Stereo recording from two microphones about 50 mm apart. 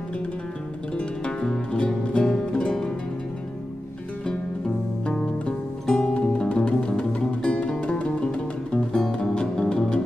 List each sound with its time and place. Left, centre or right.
1.4 s music: centre
4.3 s music: centre